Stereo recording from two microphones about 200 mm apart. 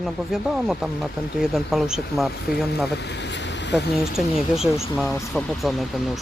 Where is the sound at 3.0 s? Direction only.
60° left (ahead or behind).